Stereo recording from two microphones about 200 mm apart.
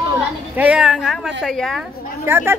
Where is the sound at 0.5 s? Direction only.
5° right (ahead or behind).